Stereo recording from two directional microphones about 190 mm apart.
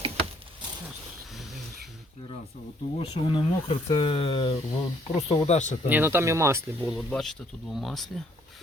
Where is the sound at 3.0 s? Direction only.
25° left (ahead or behind).